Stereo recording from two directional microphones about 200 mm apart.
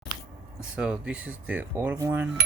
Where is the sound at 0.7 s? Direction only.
5° right (ahead or behind).